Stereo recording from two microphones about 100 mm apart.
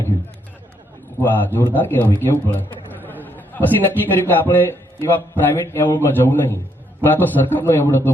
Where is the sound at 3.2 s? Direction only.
20° left (ahead or behind).